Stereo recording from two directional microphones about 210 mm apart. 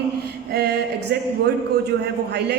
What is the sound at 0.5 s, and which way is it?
Speech, 50° right (ahead or behind).